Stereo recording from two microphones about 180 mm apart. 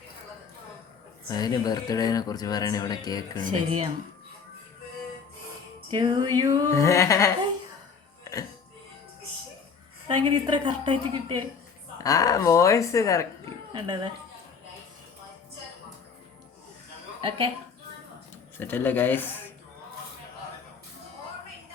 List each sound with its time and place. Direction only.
1.3 s speech: 20° left (ahead or behind)
5.9 s a woman's voice: 20° right (ahead or behind)
6.7 s a woman's voice: 15° left (ahead or behind)
8.2 s music: 20° left (ahead or behind)
10.1 s a woman's voice: 25° right (ahead or behind)
11.9 s a woman's voice: 20° left (ahead or behind)
13.7 s a woman's voice: 25° right (ahead or behind)
17.2 s a woman's voice: 30° right (ahead or behind)
18.5 s speech: 10° left (ahead or behind)